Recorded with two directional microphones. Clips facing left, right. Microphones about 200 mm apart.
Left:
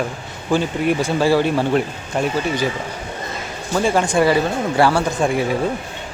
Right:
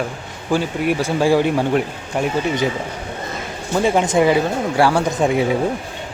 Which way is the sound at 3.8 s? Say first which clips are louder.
Right 1 dB; 20° right (ahead or behind).